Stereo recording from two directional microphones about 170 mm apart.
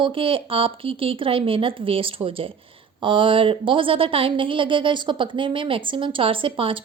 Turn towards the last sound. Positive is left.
turn(degrees=-30)  # may be behind; listen again after turning